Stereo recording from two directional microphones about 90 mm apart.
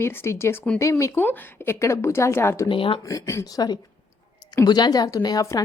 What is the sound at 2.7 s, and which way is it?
Speech, 70° left (ahead or behind).